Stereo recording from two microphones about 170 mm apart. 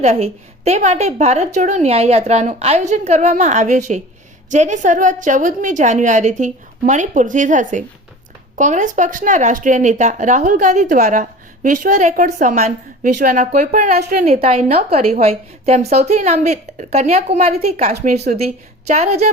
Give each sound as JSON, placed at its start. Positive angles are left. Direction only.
{"t": 0.0, "sound": "a woman's voice", "side_deg": -40}
{"t": 13.9, "sound": "a woman's voice", "side_deg": -65}
{"t": 14.3, "sound": "a woman's voice", "side_deg": -35}